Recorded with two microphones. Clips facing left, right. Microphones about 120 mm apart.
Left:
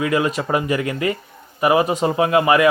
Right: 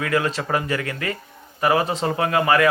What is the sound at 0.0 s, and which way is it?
Speech, 15° left (ahead or behind).